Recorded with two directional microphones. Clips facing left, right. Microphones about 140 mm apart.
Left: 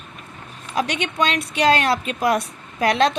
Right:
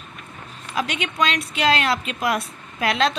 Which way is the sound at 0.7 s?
35° left (ahead or behind).